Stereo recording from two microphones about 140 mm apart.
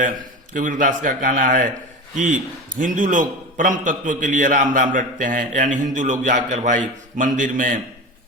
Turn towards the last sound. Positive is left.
turn(degrees=-65)  # may be behind; listen again after turning